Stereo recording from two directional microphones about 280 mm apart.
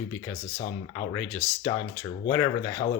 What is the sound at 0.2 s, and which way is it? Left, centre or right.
Speech, centre.